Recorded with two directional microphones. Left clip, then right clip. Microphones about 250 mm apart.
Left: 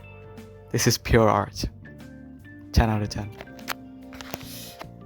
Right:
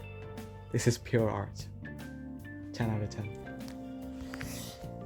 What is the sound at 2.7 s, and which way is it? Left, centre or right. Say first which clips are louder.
Speech: left 12 dB; left.